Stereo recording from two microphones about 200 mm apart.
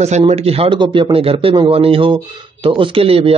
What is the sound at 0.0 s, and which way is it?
Speech, 35° right (ahead or behind).